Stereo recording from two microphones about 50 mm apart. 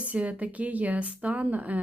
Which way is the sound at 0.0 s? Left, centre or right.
Right.